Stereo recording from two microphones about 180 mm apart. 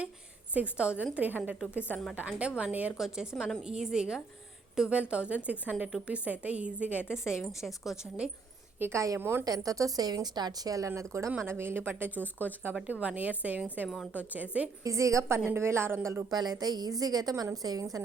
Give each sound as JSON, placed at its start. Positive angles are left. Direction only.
{"t": 0.5, "sound": "a woman's voice", "side_deg": -5}
{"t": 1.8, "sound": "a woman's voice", "side_deg": 5}
{"t": 2.1, "sound": "a woman's voice", "side_deg": -5}
{"t": 8.8, "sound": "a woman's voice", "side_deg": -15}